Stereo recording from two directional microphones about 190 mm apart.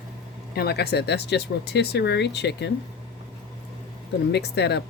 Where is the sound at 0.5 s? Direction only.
55° left (ahead or behind).